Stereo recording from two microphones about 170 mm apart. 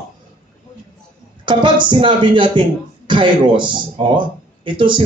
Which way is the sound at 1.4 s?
30° right (ahead or behind).